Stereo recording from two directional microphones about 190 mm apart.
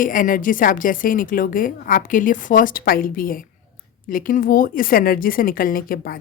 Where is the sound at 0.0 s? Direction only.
45° left (ahead or behind).